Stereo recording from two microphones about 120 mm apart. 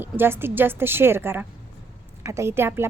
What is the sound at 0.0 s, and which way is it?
A woman's voice, 20° right (ahead or behind).